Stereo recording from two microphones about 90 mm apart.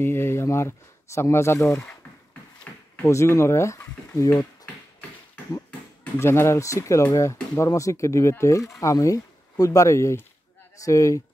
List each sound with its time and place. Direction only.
0.0 s speech: 25° left (ahead or behind)
2.7 s a sound: 20° left (ahead or behind)
3.0 s speech: 30° left (ahead or behind)
6.1 s speech: 30° left (ahead or behind)